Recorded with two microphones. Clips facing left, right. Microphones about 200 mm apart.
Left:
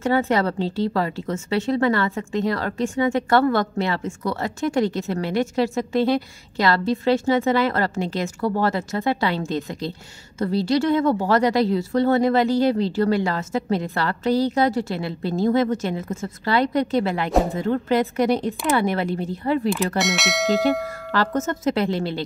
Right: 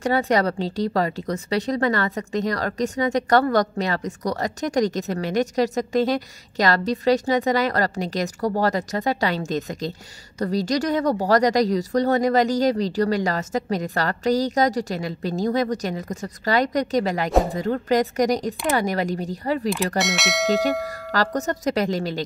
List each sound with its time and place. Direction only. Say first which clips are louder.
0.0 s speech: even; 40° right (ahead or behind)
20.0 s speech: left 1 dB; centre (ahead or behind)
21.1 s speech: left 1 dB; 40° right (ahead or behind)